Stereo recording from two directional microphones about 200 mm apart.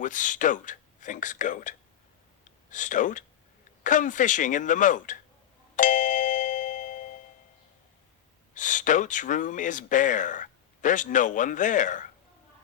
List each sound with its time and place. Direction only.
0.0 s speech: 40° left (ahead or behind)
5.7 s doorbell: 40° left (ahead or behind)
8.5 s speech: 40° left (ahead or behind)